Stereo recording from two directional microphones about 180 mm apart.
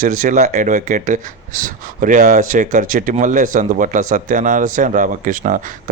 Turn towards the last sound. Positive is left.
turn(degrees=-45)  # may be behind; listen again after turning